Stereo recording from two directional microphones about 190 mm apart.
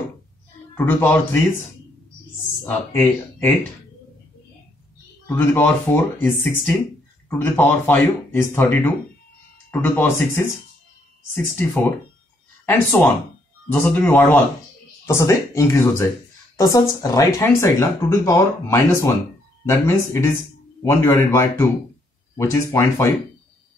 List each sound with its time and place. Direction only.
0.7 s speech: 10° left (ahead or behind)
2.6 s speech: 10° left (ahead or behind)
5.2 s speech: 10° left (ahead or behind)
13.7 s speech: 5° left (ahead or behind)